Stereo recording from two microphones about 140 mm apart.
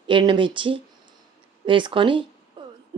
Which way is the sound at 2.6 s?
35° right (ahead or behind).